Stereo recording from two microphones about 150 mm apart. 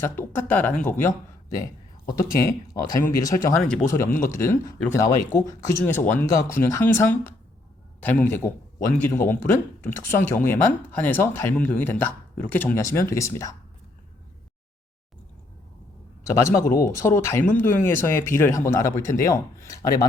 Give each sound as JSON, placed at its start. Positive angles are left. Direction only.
{"t": 0.0, "sound": "a man's voice", "side_deg": 15}
{"t": 2.8, "sound": "speech", "side_deg": 65}
{"t": 3.6, "sound": "speech", "side_deg": 5}
{"t": 3.8, "sound": "speech", "side_deg": 15}
{"t": 16.2, "sound": "a man's voice", "side_deg": 20}